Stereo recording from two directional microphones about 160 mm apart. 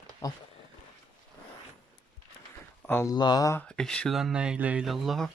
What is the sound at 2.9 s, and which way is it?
Speech, 15° left (ahead or behind).